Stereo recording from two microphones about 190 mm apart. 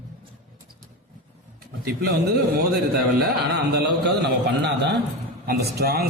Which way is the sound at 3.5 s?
60° right (ahead or behind).